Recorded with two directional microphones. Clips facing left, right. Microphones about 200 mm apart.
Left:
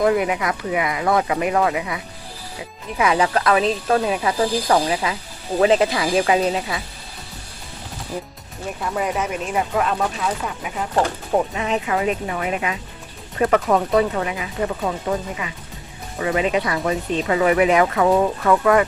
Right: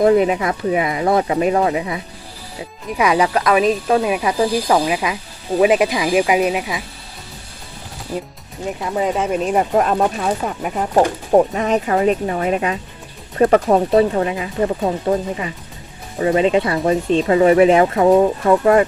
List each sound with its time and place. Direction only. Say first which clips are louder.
0.0 s speech: right 5 dB; 30° right (ahead or behind)
3.0 s speech: right 2 dB; 15° right (ahead or behind)
8.6 s speech: right 4 dB; 20° right (ahead or behind)